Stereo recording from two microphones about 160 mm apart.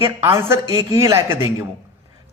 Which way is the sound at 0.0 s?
15° right (ahead or behind).